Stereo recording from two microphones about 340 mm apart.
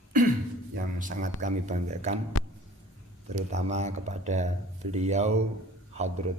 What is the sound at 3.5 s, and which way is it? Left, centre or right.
A man's voice, centre.